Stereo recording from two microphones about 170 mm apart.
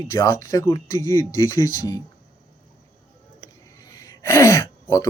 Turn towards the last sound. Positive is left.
turn(degrees=20)  # may be behind; listen again after turning